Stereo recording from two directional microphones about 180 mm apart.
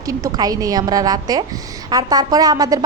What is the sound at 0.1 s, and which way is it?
A woman's voice, 20° right (ahead or behind).